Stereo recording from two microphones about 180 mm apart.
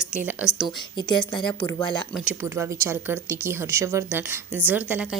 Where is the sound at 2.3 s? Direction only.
15° right (ahead or behind).